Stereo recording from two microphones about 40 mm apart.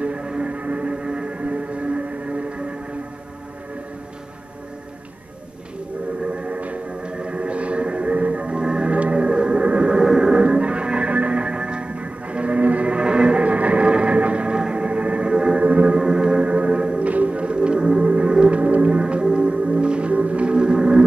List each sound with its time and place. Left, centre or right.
0.0 s music: right
6.3 s music: right
16.0 s music: right